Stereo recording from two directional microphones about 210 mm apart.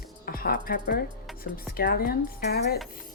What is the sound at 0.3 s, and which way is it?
Speech, 45° left (ahead or behind).